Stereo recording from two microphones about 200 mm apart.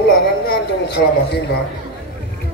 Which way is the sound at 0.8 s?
55° left (ahead or behind).